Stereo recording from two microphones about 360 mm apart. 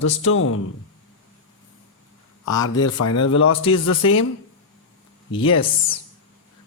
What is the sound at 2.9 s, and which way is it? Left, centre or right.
Speech, left.